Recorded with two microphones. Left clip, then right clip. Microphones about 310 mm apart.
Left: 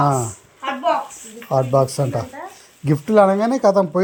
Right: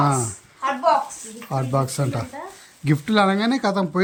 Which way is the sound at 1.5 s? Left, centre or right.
Centre.